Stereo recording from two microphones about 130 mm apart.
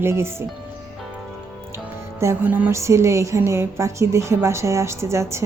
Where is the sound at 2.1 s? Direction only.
15° right (ahead or behind).